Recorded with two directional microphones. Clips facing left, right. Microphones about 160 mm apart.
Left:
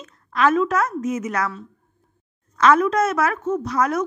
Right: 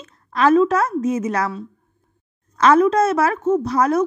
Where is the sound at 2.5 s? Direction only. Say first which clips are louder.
Right 3 dB; 30° right (ahead or behind).